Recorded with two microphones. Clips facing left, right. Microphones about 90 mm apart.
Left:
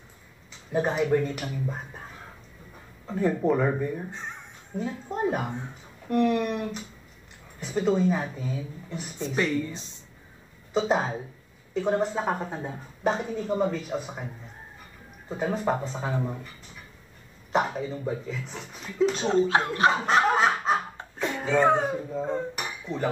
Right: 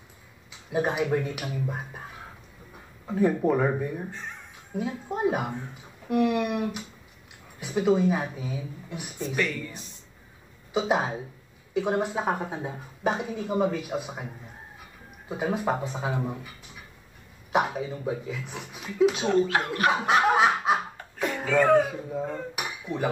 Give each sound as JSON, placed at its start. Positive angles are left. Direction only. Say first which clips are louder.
{"t": 0.5, "sound": "a woman's voice", "louder": "even", "side_deg": -10}
{"t": 4.1, "sound": "speech", "louder": "left 1 dB", "side_deg": 20}
{"t": 4.7, "sound": "a woman's voice", "louder": "even", "side_deg": -10}
{"t": 9.2, "sound": "speech", "louder": "left 3 dB", "side_deg": 25}
{"t": 10.7, "sound": "a woman's voice", "louder": "left 1 dB", "side_deg": -10}
{"t": 15.2, "sound": "a woman's voice", "louder": "even", "side_deg": -10}
{"t": 19.2, "sound": "speech", "louder": "left 1 dB", "side_deg": 25}
{"t": 19.9, "sound": "snicker", "louder": "right 3 dB", "side_deg": -10}
{"t": 21.5, "sound": "speech", "louder": "right 2 dB", "side_deg": 20}
{"t": 22.2, "sound": "a woman's voice", "louder": "right 2 dB", "side_deg": -10}
{"t": 22.6, "sound": "cutlery", "louder": "right 1 dB", "side_deg": -10}